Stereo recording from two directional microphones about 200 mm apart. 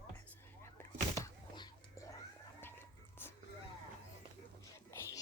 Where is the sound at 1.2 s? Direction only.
20° left (ahead or behind).